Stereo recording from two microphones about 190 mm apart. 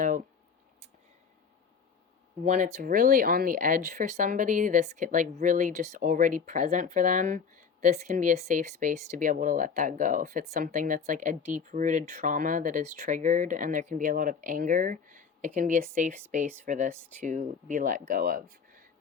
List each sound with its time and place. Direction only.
2.4 s speech: 40° right (ahead or behind)